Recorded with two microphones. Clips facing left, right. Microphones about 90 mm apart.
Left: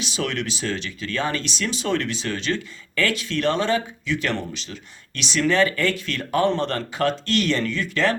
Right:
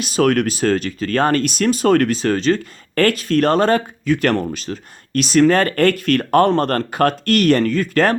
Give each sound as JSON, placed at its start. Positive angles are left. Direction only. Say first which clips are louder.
{"t": 0.0, "sound": "speech", "louder": "right 11 dB", "side_deg": -50}